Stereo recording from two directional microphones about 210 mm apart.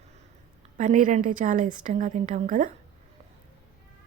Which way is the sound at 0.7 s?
35° right (ahead or behind).